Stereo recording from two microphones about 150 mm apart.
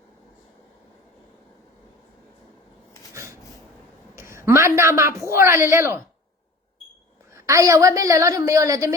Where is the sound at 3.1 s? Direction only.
20° right (ahead or behind).